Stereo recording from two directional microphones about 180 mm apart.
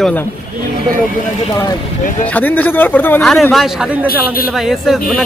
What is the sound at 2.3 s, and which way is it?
A man's voice, 10° left (ahead or behind).